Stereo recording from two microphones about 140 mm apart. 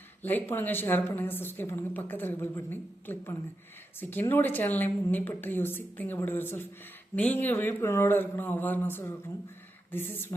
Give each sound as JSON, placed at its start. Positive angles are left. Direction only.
{"t": 0.2, "sound": "a woman's voice", "side_deg": 15}